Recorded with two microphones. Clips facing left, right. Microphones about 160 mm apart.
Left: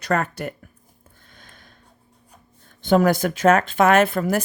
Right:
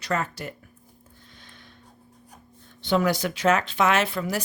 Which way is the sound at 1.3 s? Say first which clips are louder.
Left 1 dB; 50° left (ahead or behind).